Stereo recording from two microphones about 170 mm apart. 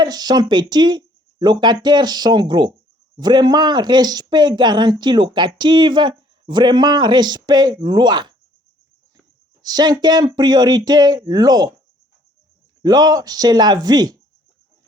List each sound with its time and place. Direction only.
0.0 s speech: 25° right (ahead or behind)
9.6 s speech: 25° right (ahead or behind)
12.8 s speech: 25° right (ahead or behind)